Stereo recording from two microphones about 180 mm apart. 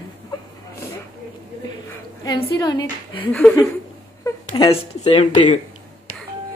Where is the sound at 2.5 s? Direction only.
20° left (ahead or behind).